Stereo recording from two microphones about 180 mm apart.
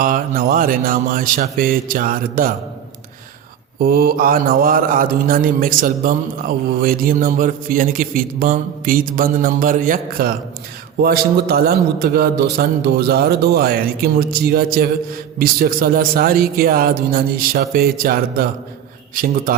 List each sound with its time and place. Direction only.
0.0 s a man's voice: 50° right (ahead or behind)
3.8 s a man's voice: 60° right (ahead or behind)